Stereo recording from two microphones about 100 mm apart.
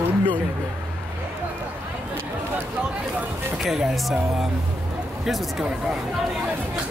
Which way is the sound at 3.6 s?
5° right (ahead or behind).